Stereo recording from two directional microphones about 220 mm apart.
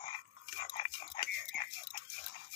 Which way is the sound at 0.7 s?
20° left (ahead or behind).